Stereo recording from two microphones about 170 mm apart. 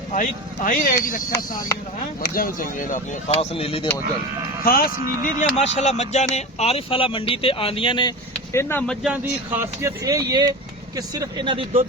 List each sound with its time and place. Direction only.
0.1 s speech: 50° left (ahead or behind)
2.2 s speech: 55° left (ahead or behind); by 3.8 s 35° left (ahead or behind)
4.6 s speech: 60° left (ahead or behind); by 8.1 s 30° left (ahead or behind)
8.5 s speech: 10° left (ahead or behind)
9.0 s speech: 10° right (ahead or behind); by 11.9 s 35° right (ahead or behind)